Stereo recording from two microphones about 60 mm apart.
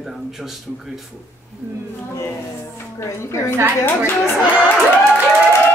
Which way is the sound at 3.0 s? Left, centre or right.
Left.